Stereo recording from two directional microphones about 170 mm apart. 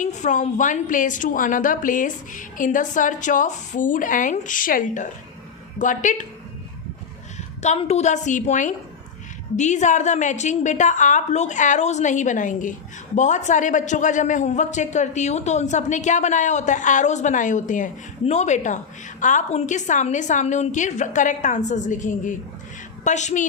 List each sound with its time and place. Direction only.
0.0 s a man's voice: 45° left (ahead or behind)
7.6 s a man's voice: 40° left (ahead or behind)